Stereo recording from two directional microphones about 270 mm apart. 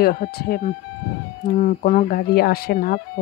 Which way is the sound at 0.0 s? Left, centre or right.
Left.